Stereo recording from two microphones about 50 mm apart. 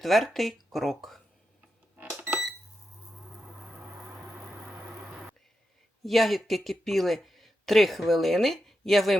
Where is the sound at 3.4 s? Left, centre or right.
Centre.